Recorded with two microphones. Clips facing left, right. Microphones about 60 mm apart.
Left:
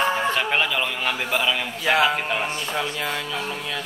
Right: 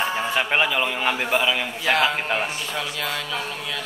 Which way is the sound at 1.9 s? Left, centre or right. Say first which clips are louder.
Left 1 dB; centre.